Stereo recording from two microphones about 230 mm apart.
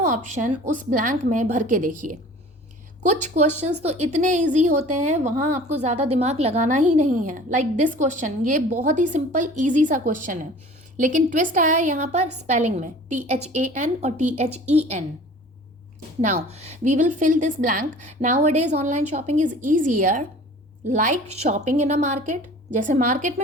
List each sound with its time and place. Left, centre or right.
0.1 s a woman's voice: right
16.2 s a woman's voice: right